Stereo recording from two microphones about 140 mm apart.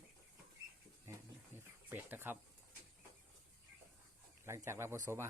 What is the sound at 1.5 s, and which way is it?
Snake, 15° right (ahead or behind).